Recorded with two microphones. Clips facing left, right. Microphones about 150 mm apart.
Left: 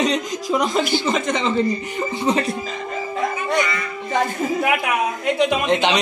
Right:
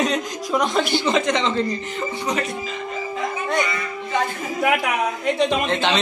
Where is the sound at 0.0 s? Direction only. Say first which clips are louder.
Left 2 dB; centre (ahead or behind).